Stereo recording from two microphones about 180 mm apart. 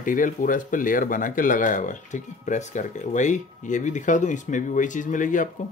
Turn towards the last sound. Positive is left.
turn(degrees=45)  # may be behind; listen again after turning